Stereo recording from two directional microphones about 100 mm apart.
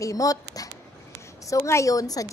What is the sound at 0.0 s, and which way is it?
A woman's voice, 35° left (ahead or behind).